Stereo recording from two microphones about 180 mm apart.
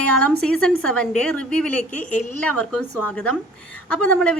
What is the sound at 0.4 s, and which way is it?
A woman's voice, 5° left (ahead or behind).